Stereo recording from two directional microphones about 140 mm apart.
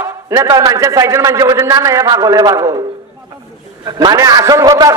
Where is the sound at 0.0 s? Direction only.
25° right (ahead or behind).